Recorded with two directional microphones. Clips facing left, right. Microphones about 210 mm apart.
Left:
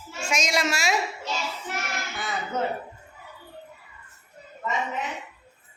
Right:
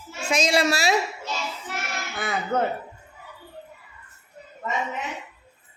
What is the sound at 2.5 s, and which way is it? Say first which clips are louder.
Speech: right 4 dB; 55° right (ahead or behind).